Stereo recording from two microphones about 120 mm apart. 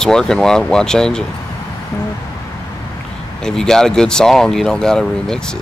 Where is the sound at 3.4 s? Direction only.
5° left (ahead or behind).